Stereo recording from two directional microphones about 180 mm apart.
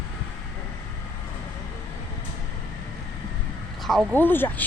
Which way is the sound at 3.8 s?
Centre (ahead or behind).